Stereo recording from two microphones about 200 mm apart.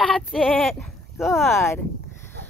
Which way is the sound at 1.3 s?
10° left (ahead or behind).